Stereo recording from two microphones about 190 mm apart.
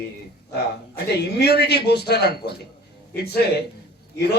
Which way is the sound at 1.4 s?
55° left (ahead or behind).